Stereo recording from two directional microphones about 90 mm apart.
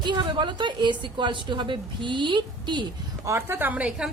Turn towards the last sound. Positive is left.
turn(degrees=-10)  # may be behind; listen again after turning